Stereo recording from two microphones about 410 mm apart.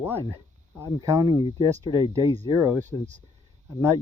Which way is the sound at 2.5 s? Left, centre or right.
Left.